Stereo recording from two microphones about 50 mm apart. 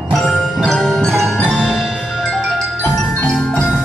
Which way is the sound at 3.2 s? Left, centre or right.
Centre.